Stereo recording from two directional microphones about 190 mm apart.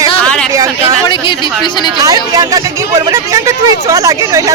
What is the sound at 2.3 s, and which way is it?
Speech, 20° right (ahead or behind).